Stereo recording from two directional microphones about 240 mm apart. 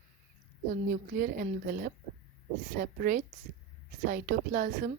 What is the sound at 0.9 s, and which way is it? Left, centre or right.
Speech, right.